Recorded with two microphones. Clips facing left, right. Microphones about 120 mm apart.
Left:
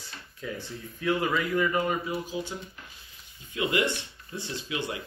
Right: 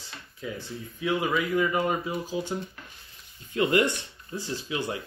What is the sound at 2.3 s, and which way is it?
Speech, 30° right (ahead or behind).